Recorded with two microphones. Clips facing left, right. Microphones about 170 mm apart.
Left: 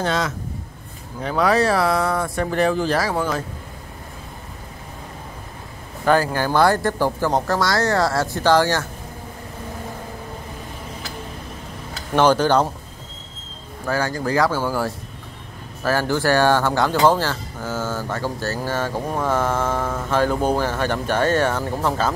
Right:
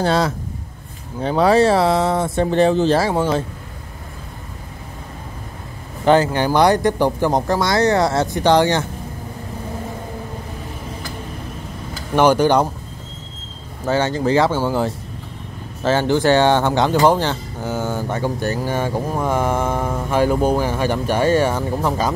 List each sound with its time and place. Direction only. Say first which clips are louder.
0.0 s a man's voice: right 5 dB; 35° right (ahead or behind)
6.0 s speech: right 4 dB; 20° right (ahead or behind)
12.2 s speech: right 2 dB; 10° right (ahead or behind)
13.8 s speech: right 5 dB; 25° right (ahead or behind)